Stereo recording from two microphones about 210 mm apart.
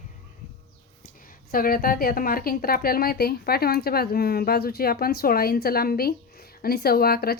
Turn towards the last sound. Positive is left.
turn(degrees=45)  # may be behind; listen again after turning